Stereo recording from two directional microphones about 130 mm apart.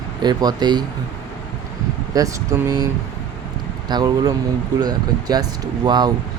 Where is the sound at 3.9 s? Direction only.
30° right (ahead or behind).